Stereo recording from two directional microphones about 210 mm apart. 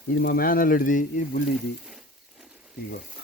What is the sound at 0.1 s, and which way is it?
Speech, 50° left (ahead or behind).